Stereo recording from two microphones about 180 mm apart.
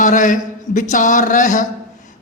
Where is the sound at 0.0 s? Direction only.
45° left (ahead or behind).